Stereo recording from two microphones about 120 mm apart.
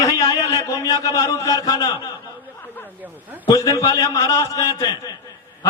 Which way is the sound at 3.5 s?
25° left (ahead or behind).